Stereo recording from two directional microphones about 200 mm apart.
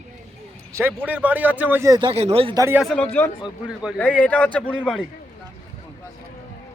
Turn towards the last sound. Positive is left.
turn(degrees=5)  # may be behind; listen again after turning